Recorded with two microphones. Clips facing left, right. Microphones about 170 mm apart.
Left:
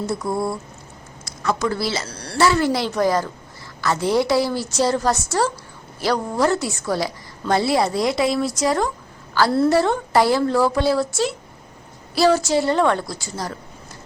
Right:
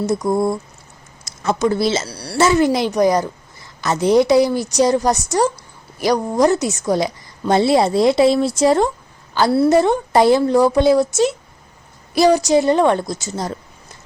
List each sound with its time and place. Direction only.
0.0 s a woman's voice: 20° right (ahead or behind)
2.0 s a woman's voice: 10° right (ahead or behind)